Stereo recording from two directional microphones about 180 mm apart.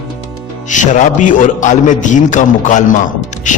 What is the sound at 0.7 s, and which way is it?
Speech, 45° left (ahead or behind).